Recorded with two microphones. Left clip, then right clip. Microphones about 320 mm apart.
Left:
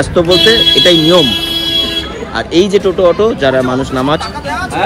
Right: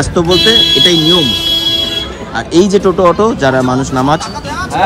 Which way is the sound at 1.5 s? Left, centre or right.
Right.